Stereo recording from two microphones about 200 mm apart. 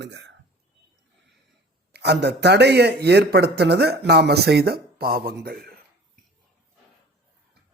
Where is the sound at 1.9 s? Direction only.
55° right (ahead or behind).